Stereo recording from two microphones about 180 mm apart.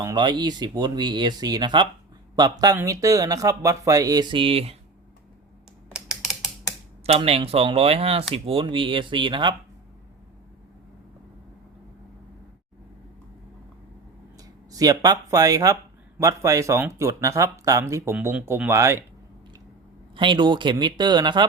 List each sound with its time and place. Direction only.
0.0 s speech: 20° right (ahead or behind)
5.9 s typing: 5° right (ahead or behind)
7.0 s speech: 35° right (ahead or behind)
14.7 s speech: 20° right (ahead or behind)
20.1 s speech: 25° right (ahead or behind)